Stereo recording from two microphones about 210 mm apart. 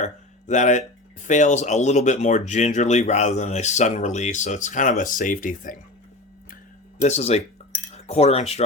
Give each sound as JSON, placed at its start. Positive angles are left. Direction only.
{"t": 0.0, "sound": "speech", "side_deg": 35}
{"t": 7.0, "sound": "cutlery", "side_deg": 30}